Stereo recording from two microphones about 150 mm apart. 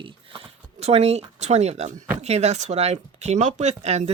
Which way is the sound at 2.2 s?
45° right (ahead or behind).